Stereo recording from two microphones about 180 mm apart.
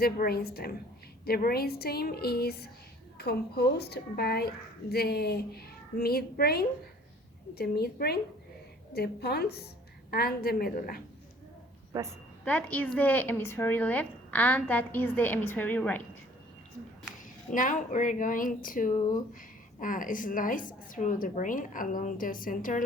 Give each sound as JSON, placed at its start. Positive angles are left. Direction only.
{"t": 0.0, "sound": "a woman's voice", "side_deg": 60}
{"t": 11.9, "sound": "a woman's voice", "side_deg": -20}
{"t": 12.5, "sound": "speech", "side_deg": 10}
{"t": 17.5, "sound": "a woman's voice", "side_deg": 45}